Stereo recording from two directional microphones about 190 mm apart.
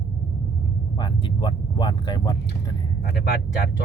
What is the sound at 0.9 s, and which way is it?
Speech, 25° left (ahead or behind).